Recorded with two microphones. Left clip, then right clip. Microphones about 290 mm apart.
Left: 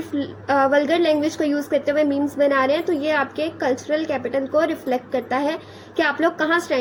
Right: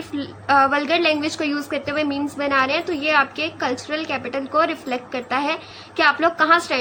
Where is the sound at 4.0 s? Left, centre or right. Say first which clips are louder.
Left 2 dB; centre.